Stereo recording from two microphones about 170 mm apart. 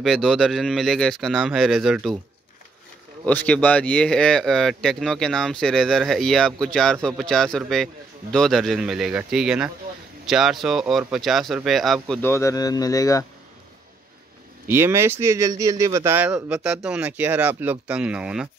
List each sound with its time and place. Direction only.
0.0 s speech: centre (ahead or behind)
3.3 s speech: 10° left (ahead or behind)
12.2 s speech: 15° left (ahead or behind)
14.7 s speech: 15° right (ahead or behind)